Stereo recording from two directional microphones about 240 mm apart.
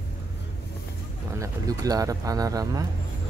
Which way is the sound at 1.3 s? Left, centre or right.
Centre.